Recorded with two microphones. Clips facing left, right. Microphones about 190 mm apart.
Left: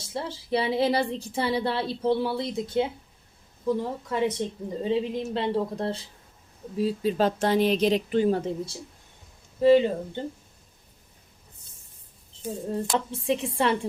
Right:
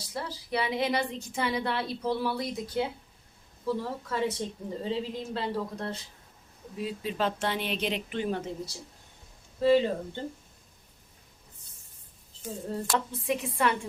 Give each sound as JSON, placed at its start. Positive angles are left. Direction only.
{"t": 0.0, "sound": "speech", "side_deg": 25}
{"t": 9.6, "sound": "speech", "side_deg": 15}
{"t": 12.4, "sound": "speech", "side_deg": 25}